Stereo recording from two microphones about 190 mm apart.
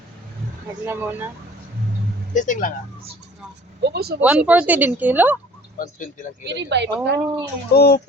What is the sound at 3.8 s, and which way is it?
Speech, 55° right (ahead or behind).